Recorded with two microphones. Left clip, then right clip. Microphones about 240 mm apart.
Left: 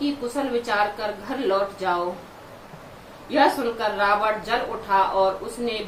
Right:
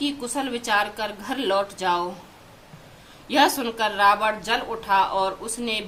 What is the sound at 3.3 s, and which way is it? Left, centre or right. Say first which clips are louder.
A woman's voice: even; right.